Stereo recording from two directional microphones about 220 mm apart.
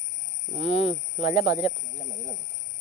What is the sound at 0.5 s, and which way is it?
Speech, 30° left (ahead or behind).